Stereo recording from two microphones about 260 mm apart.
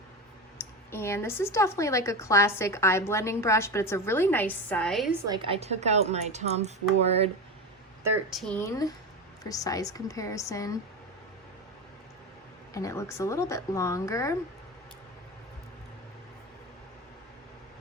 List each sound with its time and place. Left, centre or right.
0.6 s speech: centre
5.3 s speech: right
8.0 s speech: centre
12.7 s speech: centre